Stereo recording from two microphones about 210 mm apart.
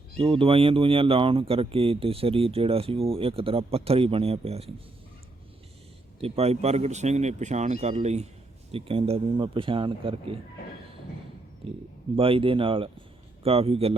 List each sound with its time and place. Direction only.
0.2 s speech: 25° right (ahead or behind)
6.1 s speech: 30° right (ahead or behind)
11.6 s speech: 25° right (ahead or behind)